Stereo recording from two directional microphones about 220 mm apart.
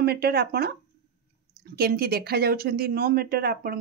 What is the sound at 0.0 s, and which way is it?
Speech, 45° right (ahead or behind).